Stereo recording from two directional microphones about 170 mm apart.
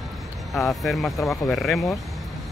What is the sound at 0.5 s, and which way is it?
Speech, centre (ahead or behind).